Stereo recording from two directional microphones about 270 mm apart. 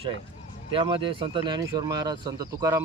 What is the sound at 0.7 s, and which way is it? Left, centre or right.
Speech, centre.